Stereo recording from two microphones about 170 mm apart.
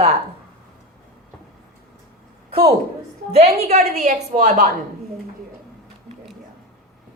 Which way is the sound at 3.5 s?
40° right (ahead or behind).